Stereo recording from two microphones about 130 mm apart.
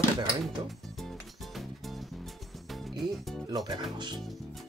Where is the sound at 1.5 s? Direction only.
Centre (ahead or behind).